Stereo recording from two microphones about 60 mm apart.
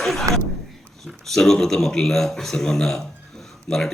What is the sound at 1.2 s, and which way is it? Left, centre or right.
Speech, centre.